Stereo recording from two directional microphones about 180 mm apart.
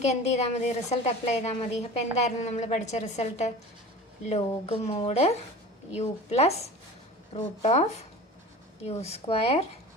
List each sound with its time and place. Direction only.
0.0 s a woman's voice: 40° left (ahead or behind)